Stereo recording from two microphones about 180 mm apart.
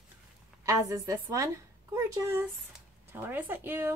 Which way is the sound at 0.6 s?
20° right (ahead or behind).